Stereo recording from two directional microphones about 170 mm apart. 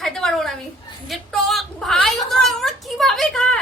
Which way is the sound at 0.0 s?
5° left (ahead or behind).